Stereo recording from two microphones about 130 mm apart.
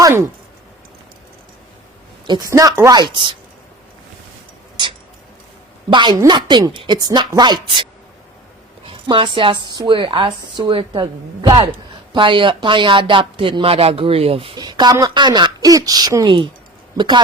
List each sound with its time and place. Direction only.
0.0 s speech: 25° right (ahead or behind)
2.2 s speech: 35° right (ahead or behind)
2.9 s speech: 35° right (ahead or behind)
5.9 s speech: 35° right (ahead or behind)
8.9 s a woman's voice: 40° right (ahead or behind)
11.0 s speech: 30° right (ahead or behind)